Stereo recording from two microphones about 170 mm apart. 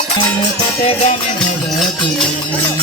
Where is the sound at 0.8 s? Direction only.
35° left (ahead or behind).